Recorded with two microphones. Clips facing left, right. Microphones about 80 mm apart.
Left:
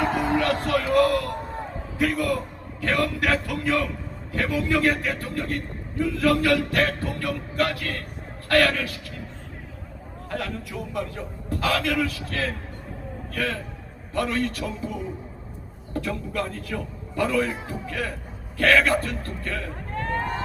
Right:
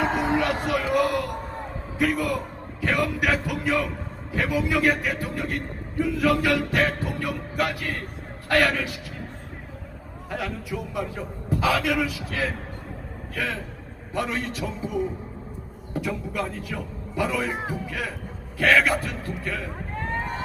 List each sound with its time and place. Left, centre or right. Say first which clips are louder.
0.0 s music: even; right
2.0 s a man's voice: even; centre
10.2 s a man's voice: even; centre